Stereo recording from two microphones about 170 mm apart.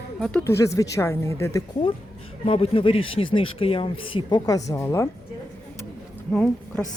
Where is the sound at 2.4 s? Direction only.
35° left (ahead or behind); by 5.1 s 15° left (ahead or behind).